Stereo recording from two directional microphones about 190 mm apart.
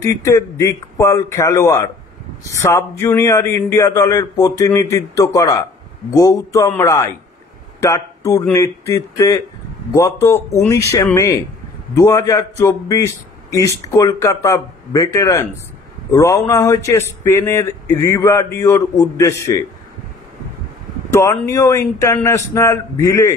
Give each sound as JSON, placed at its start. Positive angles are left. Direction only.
{"t": 0.0, "sound": "speech", "side_deg": 15}
{"t": 21.1, "sound": "speech", "side_deg": 15}